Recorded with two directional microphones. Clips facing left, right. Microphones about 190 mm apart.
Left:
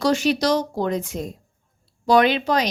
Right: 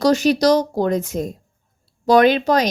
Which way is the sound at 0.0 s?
40° right (ahead or behind).